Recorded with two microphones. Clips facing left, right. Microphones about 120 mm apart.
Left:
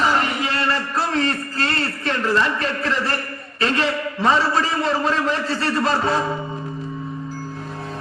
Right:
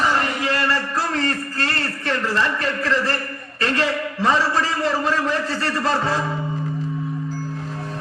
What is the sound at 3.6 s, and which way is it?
A man's voice, 25° left (ahead or behind).